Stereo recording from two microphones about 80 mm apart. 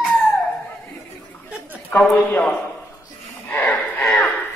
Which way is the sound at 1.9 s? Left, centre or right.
Left.